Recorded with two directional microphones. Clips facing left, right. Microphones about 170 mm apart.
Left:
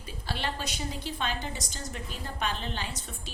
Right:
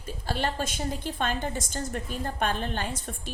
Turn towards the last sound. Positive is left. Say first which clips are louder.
# right 5 dB
turn(degrees=-50)  # may be behind; listen again after turning